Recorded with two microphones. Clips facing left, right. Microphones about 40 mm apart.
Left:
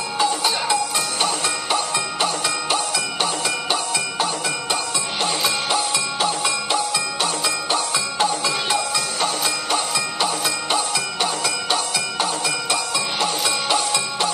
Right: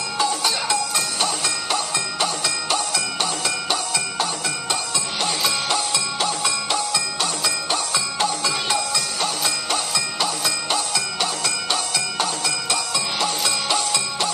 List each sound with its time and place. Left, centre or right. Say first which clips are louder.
0.2 s music: left 2 dB; centre